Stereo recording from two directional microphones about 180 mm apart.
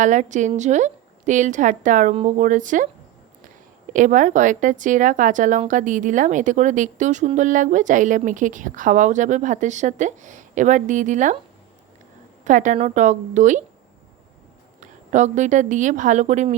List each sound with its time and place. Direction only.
0.0 s a woman's voice: 45° right (ahead or behind)
3.9 s a woman's voice: 45° right (ahead or behind)
12.5 s a woman's voice: 45° right (ahead or behind)
14.8 s a woman's voice: 40° right (ahead or behind)